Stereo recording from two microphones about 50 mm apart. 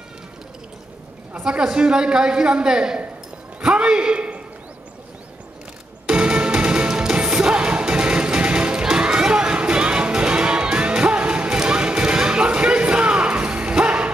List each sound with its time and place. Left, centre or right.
1.4 s a woman's voice: centre
6.0 s music: centre